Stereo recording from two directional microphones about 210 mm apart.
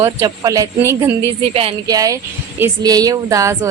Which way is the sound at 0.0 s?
15° right (ahead or behind).